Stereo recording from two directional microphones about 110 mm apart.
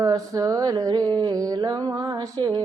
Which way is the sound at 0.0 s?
35° right (ahead or behind).